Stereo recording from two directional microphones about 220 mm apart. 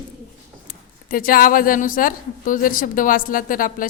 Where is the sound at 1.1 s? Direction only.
40° left (ahead or behind).